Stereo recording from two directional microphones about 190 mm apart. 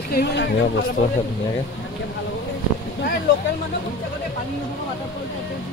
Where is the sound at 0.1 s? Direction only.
65° left (ahead or behind).